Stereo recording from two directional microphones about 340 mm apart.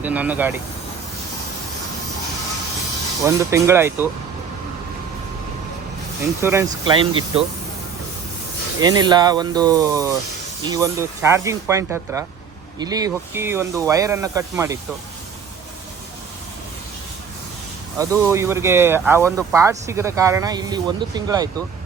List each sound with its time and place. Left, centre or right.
0.0 s speech: centre
3.2 s speech: centre
6.4 s speech: centre
8.8 s speech: centre
17.9 s speech: centre